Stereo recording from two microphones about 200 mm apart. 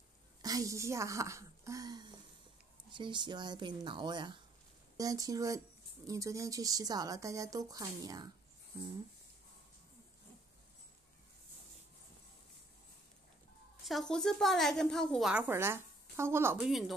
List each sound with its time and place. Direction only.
0.4 s a woman's voice: 15° right (ahead or behind)
13.8 s a woman's voice: centre (ahead or behind)